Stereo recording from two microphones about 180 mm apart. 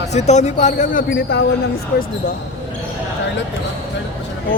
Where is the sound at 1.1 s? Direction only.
65° left (ahead or behind).